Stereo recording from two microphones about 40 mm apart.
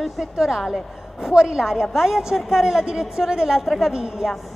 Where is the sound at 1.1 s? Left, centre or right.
Centre.